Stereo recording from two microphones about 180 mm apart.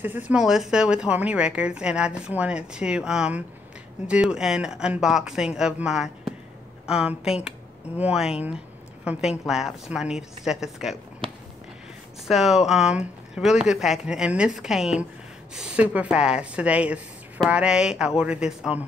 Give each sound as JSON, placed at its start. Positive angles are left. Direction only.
{"t": 0.0, "sound": "a woman's voice", "side_deg": -10}
{"t": 11.2, "sound": "a sound", "side_deg": -30}
{"t": 12.3, "sound": "a woman's voice", "side_deg": 0}